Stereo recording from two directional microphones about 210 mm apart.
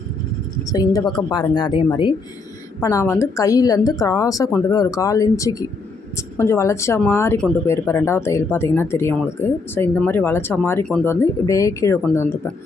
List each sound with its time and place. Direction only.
0.7 s speech: 20° left (ahead or behind)